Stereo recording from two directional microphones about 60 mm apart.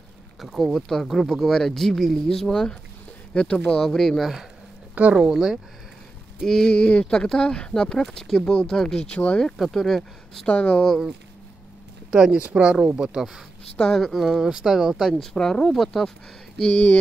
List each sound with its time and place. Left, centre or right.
0.4 s speech: centre
4.9 s speech: right
5.2 s speech: centre
6.4 s speech: centre
9.6 s speech: centre
10.4 s speech: centre
12.1 s speech: centre
13.7 s speech: centre
15.1 s speech: centre
16.7 s speech: left